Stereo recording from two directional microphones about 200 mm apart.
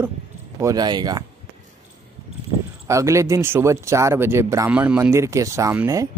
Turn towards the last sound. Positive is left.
turn(degrees=-15)  # may be behind; listen again after turning